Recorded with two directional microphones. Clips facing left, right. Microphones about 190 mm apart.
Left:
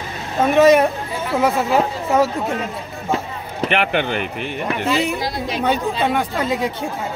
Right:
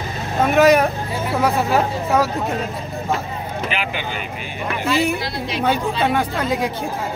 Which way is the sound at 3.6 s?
65° left (ahead or behind).